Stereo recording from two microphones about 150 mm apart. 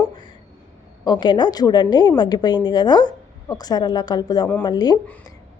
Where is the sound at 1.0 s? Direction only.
30° left (ahead or behind).